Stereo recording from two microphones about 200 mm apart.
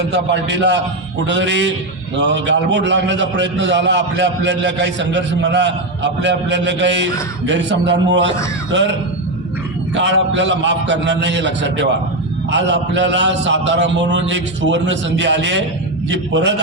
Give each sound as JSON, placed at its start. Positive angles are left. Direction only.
{"t": 0.1, "sound": "a man's voice", "side_deg": -60}
{"t": 9.9, "sound": "a man's voice", "side_deg": -65}